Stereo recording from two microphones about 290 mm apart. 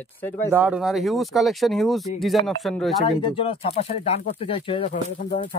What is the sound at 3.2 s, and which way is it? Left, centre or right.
Speech, centre.